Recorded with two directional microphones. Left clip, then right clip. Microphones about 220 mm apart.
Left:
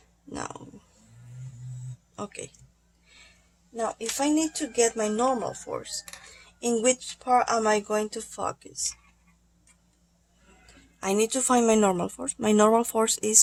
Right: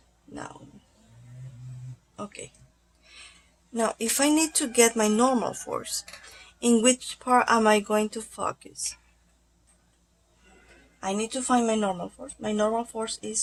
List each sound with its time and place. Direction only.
2.1 s speech: 10° left (ahead or behind)
3.8 s a woman's voice: 20° right (ahead or behind); by 8.8 s centre (ahead or behind)
11.0 s speech: 25° left (ahead or behind)